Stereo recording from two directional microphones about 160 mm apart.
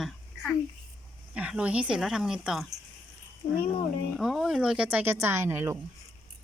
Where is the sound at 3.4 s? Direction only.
35° left (ahead or behind).